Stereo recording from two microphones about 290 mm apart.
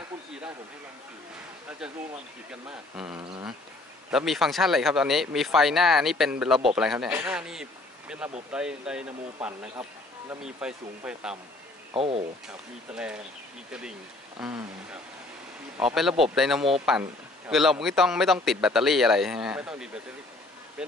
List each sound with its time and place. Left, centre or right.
2.7 s speech: centre
11.9 s speech: centre
12.4 s speech: centre